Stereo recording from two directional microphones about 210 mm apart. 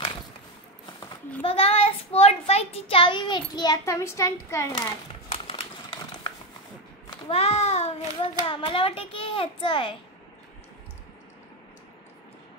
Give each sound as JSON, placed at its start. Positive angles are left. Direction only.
{"t": 1.4, "sound": "a child's voice", "side_deg": 30}
{"t": 5.3, "sound": "crumpling", "side_deg": 25}
{"t": 7.1, "sound": "a child's voice", "side_deg": 25}